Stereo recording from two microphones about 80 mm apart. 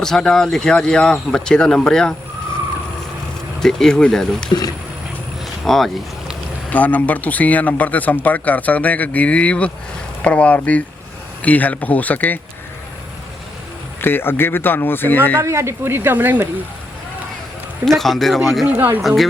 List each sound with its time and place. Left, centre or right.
0.0 s speech: centre
3.6 s speech: centre
5.6 s speech: centre
6.7 s speech: left
14.0 s speech: left
15.4 s speech: right
17.8 s speech: centre
18.7 s speech: right
19.0 s speech: centre